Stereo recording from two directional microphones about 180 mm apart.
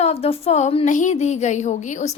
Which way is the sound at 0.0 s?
35° left (ahead or behind).